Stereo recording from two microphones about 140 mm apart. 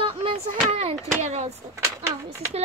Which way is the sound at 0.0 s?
40° right (ahead or behind).